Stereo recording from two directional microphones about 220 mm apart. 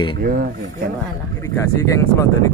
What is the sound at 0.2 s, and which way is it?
Speech, 40° right (ahead or behind).